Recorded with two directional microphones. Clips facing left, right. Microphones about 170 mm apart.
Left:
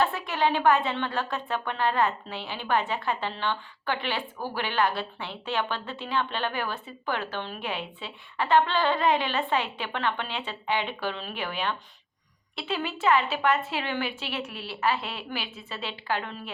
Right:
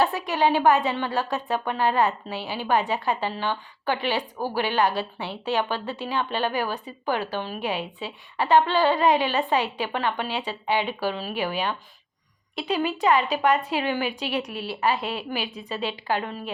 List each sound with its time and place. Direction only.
0.3 s a woman's voice: 15° right (ahead or behind)